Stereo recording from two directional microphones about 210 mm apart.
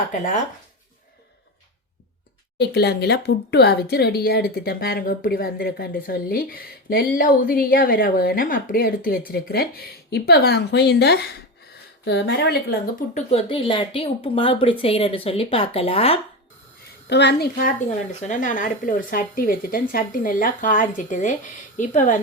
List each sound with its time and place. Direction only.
0.1 s speech: 35° left (ahead or behind)
2.6 s speech: 50° left (ahead or behind)
13.1 s speech: 25° left (ahead or behind)
17.1 s speech: 55° left (ahead or behind); by 22.2 s 35° left (ahead or behind)